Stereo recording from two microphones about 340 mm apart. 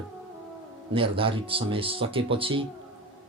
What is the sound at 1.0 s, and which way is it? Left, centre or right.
Speech, centre.